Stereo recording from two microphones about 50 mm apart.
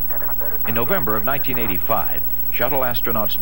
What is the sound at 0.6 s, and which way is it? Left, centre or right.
Speech, centre.